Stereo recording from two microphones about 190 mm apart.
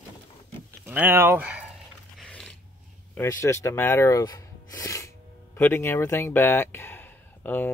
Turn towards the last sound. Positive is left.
turn(degrees=10)  # may be behind; listen again after turning